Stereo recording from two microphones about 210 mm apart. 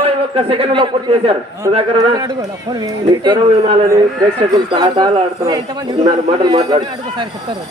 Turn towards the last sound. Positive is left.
turn(degrees=-20)  # may be behind; listen again after turning